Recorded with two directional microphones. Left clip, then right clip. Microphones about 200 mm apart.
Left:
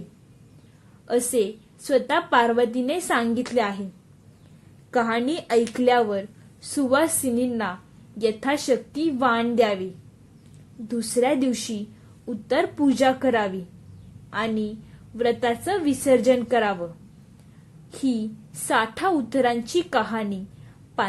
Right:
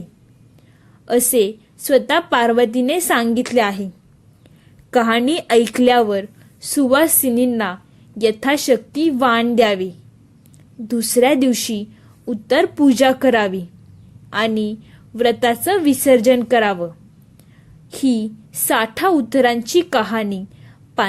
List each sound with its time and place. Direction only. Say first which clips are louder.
1.0 s a woman's voice: right 7 dB; 35° right (ahead or behind)
4.9 s a woman's voice: right 7 dB; 40° right (ahead or behind)
17.9 s a woman's voice: right 7 dB; 40° right (ahead or behind)